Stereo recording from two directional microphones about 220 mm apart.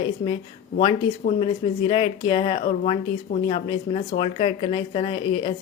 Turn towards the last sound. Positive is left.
turn(degrees=25)  # may be behind; listen again after turning